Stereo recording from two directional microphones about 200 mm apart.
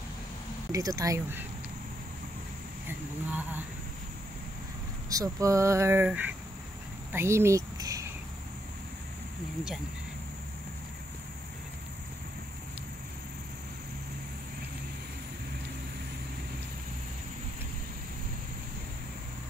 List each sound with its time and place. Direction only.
0.7 s speech: 15° right (ahead or behind)
2.9 s speech: 10° right (ahead or behind)
5.1 s speech: 15° right (ahead or behind)